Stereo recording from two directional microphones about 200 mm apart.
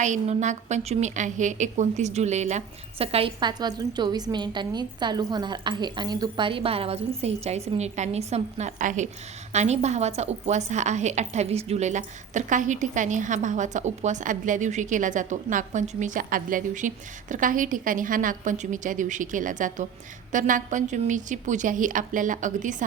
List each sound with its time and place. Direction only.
0.0 s a woman's voice: 35° right (ahead or behind)